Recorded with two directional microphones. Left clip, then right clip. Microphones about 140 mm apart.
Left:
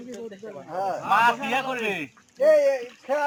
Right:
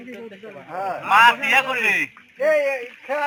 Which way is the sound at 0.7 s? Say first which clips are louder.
Right 1 dB; 35° right (ahead or behind).